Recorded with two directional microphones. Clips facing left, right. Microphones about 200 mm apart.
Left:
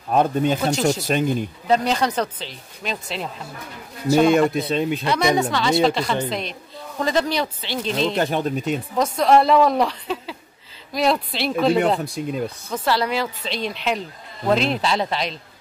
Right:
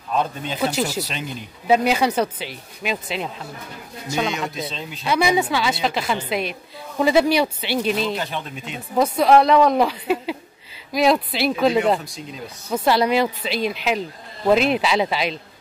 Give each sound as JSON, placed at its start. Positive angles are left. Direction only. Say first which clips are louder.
{"t": 0.1, "sound": "speech", "louder": "left 6 dB", "side_deg": 50}
{"t": 0.6, "sound": "a woman's voice", "louder": "left 2 dB", "side_deg": -5}
{"t": 1.0, "sound": "speech", "louder": "left 10 dB", "side_deg": 50}
{"t": 1.7, "sound": "speech", "louder": "right 2 dB", "side_deg": -10}
{"t": 4.3, "sound": "a man's voice", "louder": "left 10 dB", "side_deg": 55}
{"t": 5.0, "sound": "a woman's voice", "louder": "right 5 dB", "side_deg": -5}
{"t": 8.2, "sound": "speech", "louder": "left 8 dB", "side_deg": 45}
{"t": 8.9, "sound": "a woman's voice", "louder": "right 2 dB", "side_deg": -5}
{"t": 12.0, "sound": "a man's voice", "louder": "left 9 dB", "side_deg": 55}
{"t": 12.7, "sound": "speech", "louder": "right 4 dB", "side_deg": -15}
{"t": 13.5, "sound": "a woman's voice", "louder": "right 2 dB", "side_deg": -5}